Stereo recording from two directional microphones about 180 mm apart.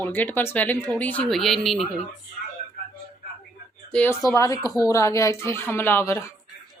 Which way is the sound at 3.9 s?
5° left (ahead or behind).